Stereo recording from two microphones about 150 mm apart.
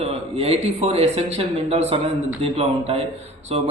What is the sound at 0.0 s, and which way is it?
A man's voice, 40° right (ahead or behind).